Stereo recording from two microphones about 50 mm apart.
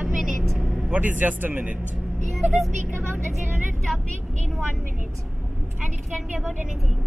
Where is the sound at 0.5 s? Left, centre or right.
Centre.